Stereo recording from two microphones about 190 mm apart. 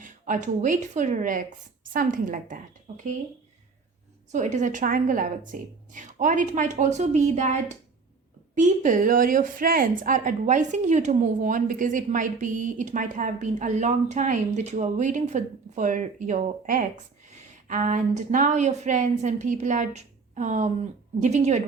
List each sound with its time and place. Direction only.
0.0 s speech: 40° right (ahead or behind)
4.3 s a woman's voice: 40° right (ahead or behind)